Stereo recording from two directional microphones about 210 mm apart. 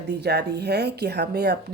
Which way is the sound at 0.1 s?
50° right (ahead or behind).